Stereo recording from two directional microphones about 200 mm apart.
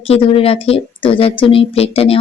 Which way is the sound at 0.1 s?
30° left (ahead or behind).